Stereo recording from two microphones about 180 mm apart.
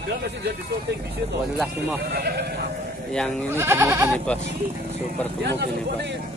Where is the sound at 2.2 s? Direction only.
60° right (ahead or behind).